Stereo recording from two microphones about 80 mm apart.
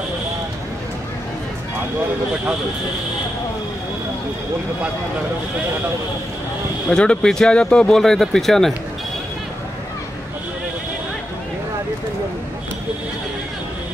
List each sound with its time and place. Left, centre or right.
6.9 s speech: centre